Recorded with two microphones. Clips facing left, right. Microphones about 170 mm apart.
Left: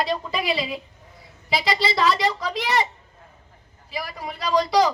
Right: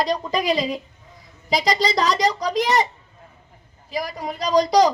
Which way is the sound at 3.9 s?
45° right (ahead or behind).